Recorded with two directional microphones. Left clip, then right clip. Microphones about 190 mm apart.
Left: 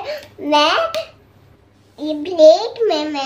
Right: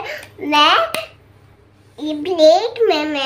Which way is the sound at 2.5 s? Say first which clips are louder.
Right 2 dB; 15° left (ahead or behind).